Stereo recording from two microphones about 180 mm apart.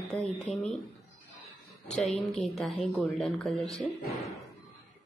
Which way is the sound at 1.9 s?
5° left (ahead or behind).